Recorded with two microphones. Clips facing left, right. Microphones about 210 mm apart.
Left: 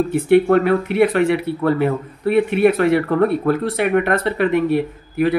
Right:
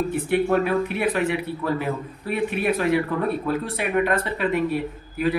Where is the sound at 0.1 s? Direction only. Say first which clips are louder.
Left 10 dB; 65° left (ahead or behind).